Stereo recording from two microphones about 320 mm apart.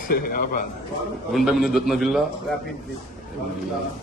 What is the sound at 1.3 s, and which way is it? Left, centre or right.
Speech, centre.